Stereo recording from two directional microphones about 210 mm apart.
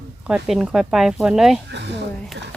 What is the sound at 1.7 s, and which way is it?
Speech, 55° right (ahead or behind).